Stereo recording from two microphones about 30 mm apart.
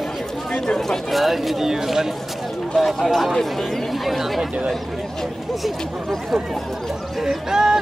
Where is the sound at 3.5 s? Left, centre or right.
Centre.